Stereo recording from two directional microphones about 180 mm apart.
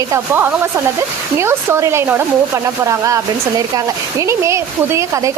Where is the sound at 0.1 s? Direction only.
10° right (ahead or behind).